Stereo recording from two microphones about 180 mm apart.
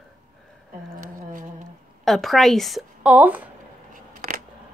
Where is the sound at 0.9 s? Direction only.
50° right (ahead or behind).